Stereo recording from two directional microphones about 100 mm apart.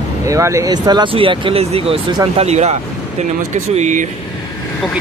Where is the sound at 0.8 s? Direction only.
45° right (ahead or behind).